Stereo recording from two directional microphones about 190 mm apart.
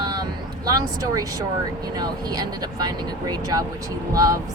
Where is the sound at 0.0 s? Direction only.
20° right (ahead or behind).